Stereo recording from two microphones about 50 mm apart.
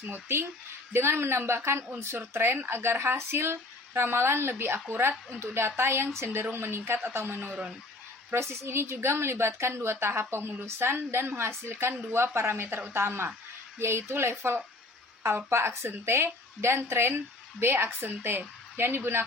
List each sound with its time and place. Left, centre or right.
0.1 s a woman's voice: right
6.2 s a woman's voice: right
15.4 s a woman's voice: right